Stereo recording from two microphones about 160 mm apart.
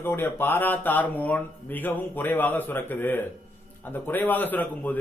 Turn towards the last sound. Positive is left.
turn(degrees=10)  # may be behind; listen again after turning